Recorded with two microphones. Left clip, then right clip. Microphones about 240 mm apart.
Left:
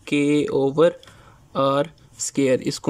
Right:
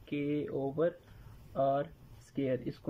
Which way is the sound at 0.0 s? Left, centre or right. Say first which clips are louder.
Left 15 dB; left.